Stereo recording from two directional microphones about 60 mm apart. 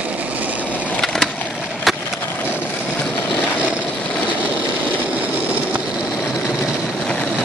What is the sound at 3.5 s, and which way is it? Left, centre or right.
Vehicle, right.